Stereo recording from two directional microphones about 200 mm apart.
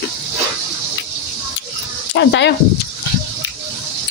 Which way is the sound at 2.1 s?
65° left (ahead or behind).